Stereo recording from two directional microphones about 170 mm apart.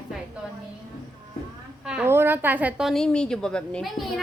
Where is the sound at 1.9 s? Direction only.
10° right (ahead or behind).